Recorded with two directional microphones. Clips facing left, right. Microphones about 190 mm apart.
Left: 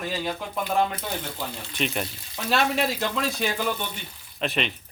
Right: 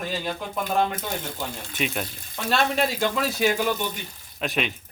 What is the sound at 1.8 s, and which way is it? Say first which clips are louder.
A man's voice: even; centre (ahead or behind).